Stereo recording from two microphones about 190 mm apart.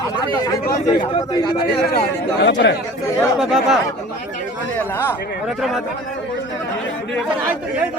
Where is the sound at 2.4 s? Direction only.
65° left (ahead or behind).